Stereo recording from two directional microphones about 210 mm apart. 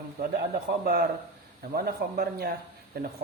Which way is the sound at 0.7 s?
45° right (ahead or behind).